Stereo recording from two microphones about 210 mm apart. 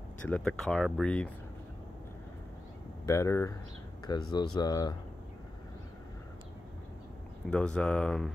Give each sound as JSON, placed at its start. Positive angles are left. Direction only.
{"t": 0.3, "sound": "speech", "side_deg": 5}
{"t": 3.1, "sound": "speech", "side_deg": 15}
{"t": 7.4, "sound": "speech", "side_deg": 5}